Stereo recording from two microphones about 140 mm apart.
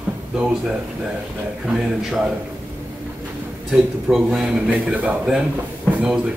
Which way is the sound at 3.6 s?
Centre (ahead or behind).